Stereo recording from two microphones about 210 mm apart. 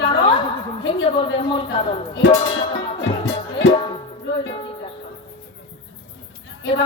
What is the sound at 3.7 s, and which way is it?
Music, 25° left (ahead or behind).